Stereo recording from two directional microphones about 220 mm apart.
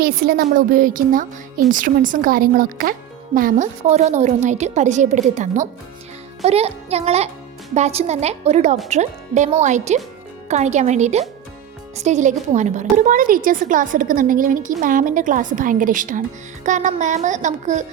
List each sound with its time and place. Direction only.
0.0 s a woman's voice: 45° right (ahead or behind)